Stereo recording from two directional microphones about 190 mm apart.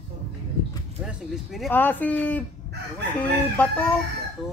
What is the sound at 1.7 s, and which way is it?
Speech, 10° left (ahead or behind).